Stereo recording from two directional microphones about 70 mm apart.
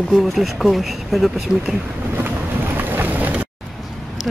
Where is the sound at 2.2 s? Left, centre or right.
Right.